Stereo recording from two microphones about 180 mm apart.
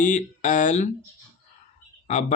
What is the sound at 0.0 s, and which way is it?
Speech, 45° left (ahead or behind).